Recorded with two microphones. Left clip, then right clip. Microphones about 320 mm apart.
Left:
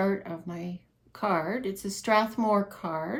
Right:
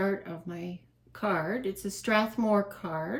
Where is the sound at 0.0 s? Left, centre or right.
Centre.